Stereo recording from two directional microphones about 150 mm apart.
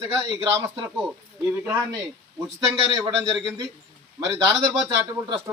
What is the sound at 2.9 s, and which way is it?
Speech, 25° right (ahead or behind).